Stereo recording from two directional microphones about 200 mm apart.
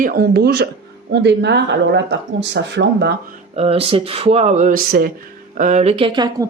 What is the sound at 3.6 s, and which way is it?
Speech, 30° right (ahead or behind).